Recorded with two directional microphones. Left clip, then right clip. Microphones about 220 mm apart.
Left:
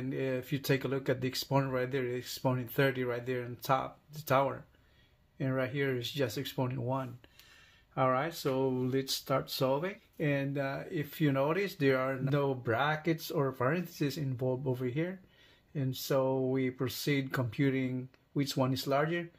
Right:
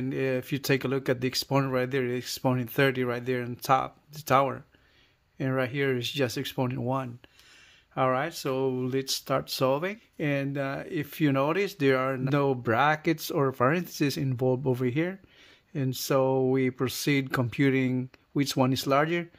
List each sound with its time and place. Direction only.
0.1 s speech: 45° right (ahead or behind)